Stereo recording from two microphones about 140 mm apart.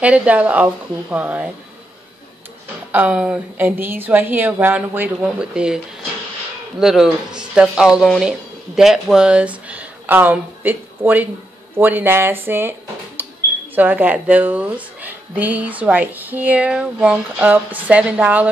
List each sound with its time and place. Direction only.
0.0 s a woman's voice: 10° right (ahead or behind)
2.9 s a woman's voice: 10° right (ahead or behind)
6.8 s a woman's voice: 5° right (ahead or behind)
13.2 s a sound: 15° right (ahead or behind)
13.7 s a woman's voice: 10° right (ahead or behind)